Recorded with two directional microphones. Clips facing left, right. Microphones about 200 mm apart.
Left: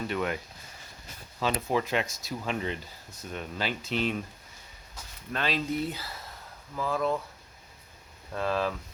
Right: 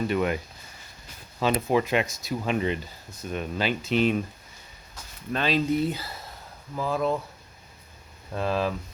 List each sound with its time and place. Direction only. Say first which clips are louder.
0.1 s speech: right 3 dB; 15° right (ahead or behind)
1.4 s speech: right 5 dB; 20° right (ahead or behind)
5.3 s speech: right 6 dB; 20° right (ahead or behind)
8.3 s speech: right 2 dB; 15° right (ahead or behind)